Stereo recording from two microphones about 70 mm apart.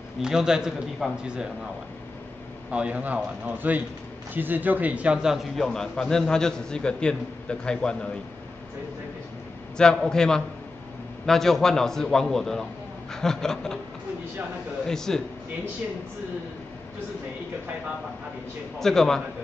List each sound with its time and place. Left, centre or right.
0.2 s a man's voice: centre
2.7 s a man's voice: centre
9.8 s a man's voice: centre
14.9 s a man's voice: centre
18.8 s a man's voice: centre